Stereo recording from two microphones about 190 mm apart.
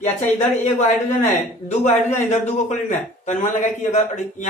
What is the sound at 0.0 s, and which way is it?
A man's voice, 35° left (ahead or behind).